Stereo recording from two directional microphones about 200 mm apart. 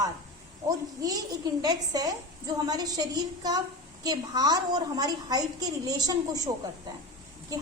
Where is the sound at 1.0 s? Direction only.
20° right (ahead or behind).